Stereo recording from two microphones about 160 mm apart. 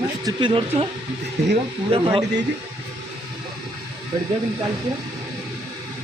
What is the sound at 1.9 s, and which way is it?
Speech, 35° right (ahead or behind).